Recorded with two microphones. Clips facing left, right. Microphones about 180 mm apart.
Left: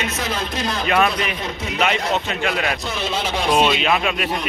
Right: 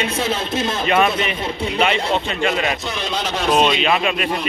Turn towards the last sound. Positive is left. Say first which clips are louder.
# right 1 dB
turn(degrees=0)  # may be behind; listen again after turning